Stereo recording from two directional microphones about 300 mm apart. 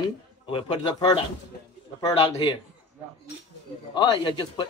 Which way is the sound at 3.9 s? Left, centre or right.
Centre.